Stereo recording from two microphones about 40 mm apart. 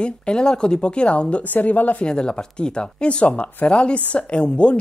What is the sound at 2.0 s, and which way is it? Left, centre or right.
A woman's voice, left.